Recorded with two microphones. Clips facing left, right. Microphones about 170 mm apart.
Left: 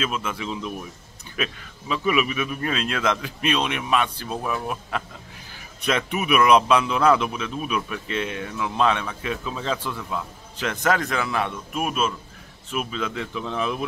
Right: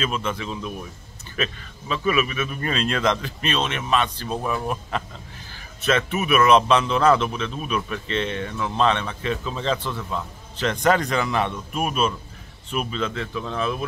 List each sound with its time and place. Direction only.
0.0 s speech: 5° left (ahead or behind)